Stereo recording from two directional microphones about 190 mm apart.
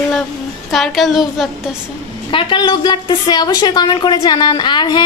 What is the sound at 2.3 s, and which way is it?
A woman's voice, 25° left (ahead or behind).